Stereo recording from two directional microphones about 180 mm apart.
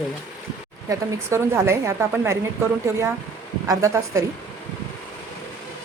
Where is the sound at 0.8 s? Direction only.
15° right (ahead or behind).